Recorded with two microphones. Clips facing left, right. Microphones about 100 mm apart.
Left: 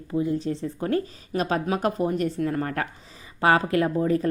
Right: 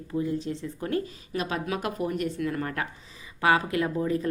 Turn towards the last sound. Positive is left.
turn(degrees=40)  # may be behind; listen again after turning